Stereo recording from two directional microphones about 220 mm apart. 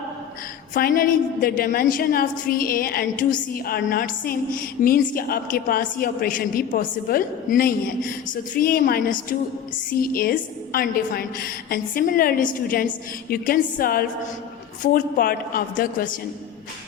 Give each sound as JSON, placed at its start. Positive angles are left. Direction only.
{"t": 0.7, "sound": "a woman's voice", "side_deg": 40}